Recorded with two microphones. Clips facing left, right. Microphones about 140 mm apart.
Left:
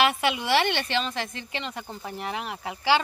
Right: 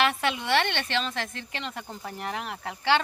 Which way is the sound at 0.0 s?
5° left (ahead or behind).